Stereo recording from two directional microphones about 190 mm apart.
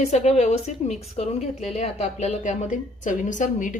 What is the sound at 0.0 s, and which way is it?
A woman's voice, 35° left (ahead or behind).